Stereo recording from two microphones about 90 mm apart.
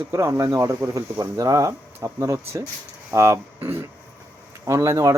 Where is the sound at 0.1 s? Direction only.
30° right (ahead or behind).